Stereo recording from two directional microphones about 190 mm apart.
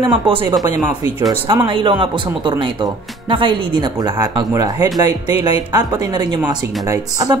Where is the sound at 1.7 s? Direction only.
25° right (ahead or behind).